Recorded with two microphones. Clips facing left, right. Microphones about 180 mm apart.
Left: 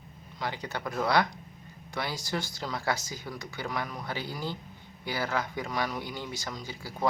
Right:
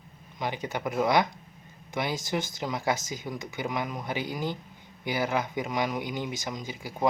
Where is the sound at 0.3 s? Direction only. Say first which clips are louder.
Right 3 dB; 20° right (ahead or behind).